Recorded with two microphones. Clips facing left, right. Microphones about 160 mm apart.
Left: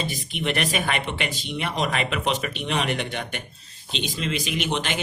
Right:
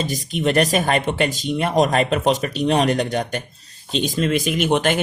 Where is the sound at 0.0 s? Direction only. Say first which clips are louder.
Right 7 dB; 40° right (ahead or behind).